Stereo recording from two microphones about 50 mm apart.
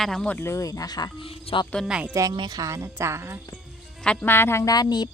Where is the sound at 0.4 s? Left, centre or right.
Left.